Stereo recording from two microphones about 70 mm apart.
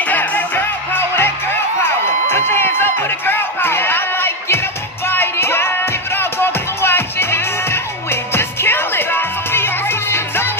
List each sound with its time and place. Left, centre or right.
0.0 s music: left
1.8 s a sound: left
5.0 s music: left